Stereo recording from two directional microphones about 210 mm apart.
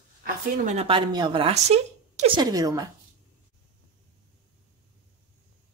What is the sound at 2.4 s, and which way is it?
Speech, 15° right (ahead or behind).